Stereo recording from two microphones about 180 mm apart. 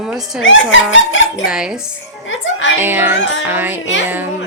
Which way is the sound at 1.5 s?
5° right (ahead or behind).